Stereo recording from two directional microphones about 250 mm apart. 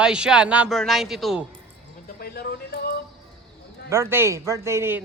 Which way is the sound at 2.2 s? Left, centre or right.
Left.